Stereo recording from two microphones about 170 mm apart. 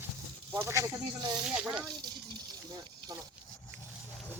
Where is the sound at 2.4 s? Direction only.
25° right (ahead or behind).